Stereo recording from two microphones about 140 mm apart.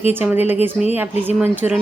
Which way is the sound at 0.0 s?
15° right (ahead or behind).